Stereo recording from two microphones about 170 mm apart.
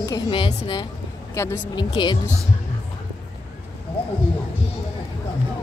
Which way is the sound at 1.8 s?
25° left (ahead or behind).